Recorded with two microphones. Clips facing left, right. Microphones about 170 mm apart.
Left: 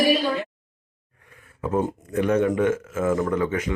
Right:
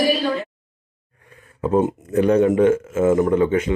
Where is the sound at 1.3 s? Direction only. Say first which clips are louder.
Right 6 dB; 30° right (ahead or behind).